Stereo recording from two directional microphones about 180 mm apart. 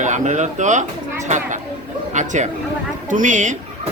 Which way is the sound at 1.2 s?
40° right (ahead or behind).